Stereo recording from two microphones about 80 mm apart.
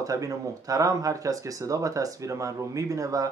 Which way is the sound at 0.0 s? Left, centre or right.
Right.